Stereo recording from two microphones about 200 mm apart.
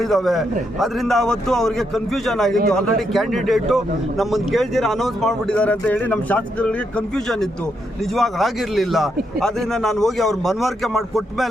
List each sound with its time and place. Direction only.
0.0 s speech: centre (ahead or behind)